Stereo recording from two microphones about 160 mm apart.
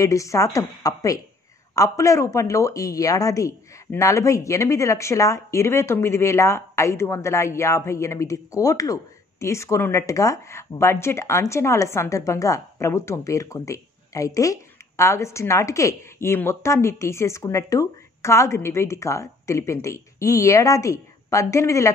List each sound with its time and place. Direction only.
0.0 s a woman's voice: 20° left (ahead or behind)